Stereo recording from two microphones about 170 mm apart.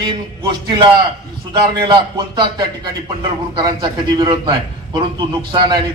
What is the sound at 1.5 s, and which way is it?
A man's voice, 30° right (ahead or behind).